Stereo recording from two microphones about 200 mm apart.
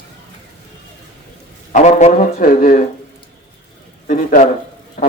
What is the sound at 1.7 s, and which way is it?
Speech, 35° left (ahead or behind).